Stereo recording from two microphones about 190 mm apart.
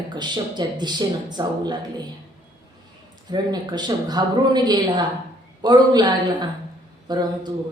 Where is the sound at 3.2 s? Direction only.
20° right (ahead or behind).